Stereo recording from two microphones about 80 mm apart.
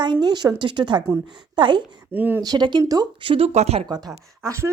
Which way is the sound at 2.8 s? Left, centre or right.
Right.